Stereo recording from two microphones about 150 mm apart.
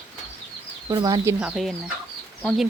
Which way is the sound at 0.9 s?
25° right (ahead or behind).